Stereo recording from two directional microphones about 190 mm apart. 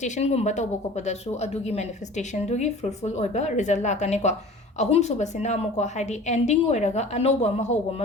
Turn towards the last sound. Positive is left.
turn(degrees=35)  # may be behind; listen again after turning